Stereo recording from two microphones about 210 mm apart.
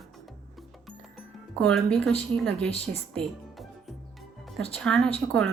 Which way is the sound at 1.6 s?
Centre (ahead or behind).